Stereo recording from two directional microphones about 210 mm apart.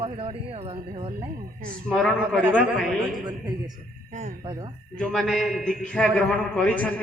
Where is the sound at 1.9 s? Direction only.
5° left (ahead or behind).